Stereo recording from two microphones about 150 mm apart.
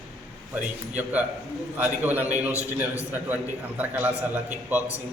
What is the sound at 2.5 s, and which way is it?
Speech, 20° left (ahead or behind).